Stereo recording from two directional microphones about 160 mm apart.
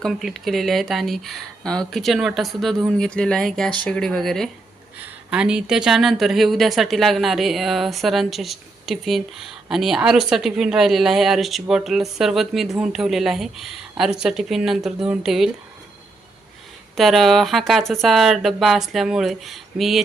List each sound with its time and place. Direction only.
0.0 s a woman's voice: centre (ahead or behind)
17.0 s a woman's voice: centre (ahead or behind)